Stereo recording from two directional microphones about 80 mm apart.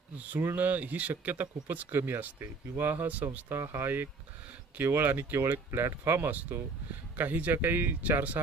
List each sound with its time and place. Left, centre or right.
0.3 s speech: right
7.2 s speech: right